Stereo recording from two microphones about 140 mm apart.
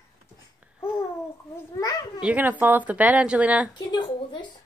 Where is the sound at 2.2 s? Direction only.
10° right (ahead or behind).